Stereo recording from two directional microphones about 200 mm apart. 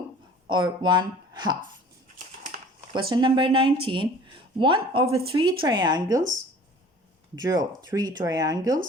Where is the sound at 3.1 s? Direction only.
25° right (ahead or behind).